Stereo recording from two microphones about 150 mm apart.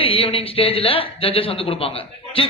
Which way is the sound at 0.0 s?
40° left (ahead or behind).